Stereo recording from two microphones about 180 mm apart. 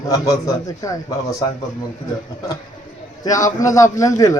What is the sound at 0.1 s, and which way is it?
A man's voice, 20° left (ahead or behind).